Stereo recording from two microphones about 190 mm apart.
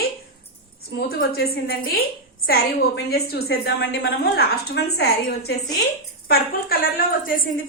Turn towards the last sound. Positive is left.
turn(degrees=50)  # may be behind; listen again after turning